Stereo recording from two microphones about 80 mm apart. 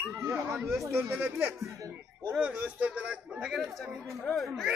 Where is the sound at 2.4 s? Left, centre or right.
Centre.